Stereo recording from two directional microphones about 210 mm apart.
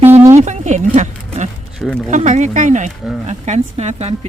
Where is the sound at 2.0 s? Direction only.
35° right (ahead or behind).